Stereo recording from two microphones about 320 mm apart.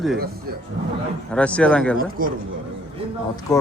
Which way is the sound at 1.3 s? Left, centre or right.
Centre.